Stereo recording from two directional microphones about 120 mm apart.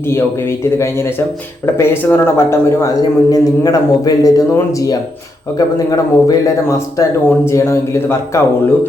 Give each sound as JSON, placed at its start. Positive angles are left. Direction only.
{"t": 0.6, "sound": "a man's voice", "side_deg": 20}